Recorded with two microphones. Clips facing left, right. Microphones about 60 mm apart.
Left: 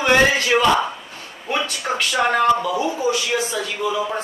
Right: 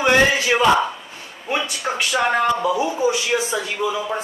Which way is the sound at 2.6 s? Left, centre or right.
Centre.